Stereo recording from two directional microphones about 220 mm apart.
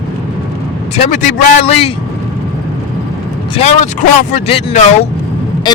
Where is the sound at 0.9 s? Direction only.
35° left (ahead or behind).